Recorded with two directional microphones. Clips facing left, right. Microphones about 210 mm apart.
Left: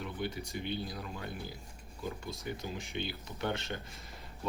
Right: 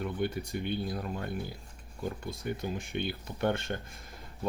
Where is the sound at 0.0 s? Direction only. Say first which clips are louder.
Right 5 dB; 50° right (ahead or behind).